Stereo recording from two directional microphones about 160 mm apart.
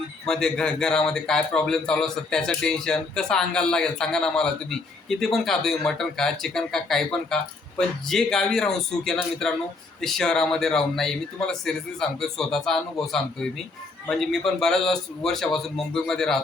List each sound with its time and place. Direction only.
0.3 s a man's voice: 5° left (ahead or behind)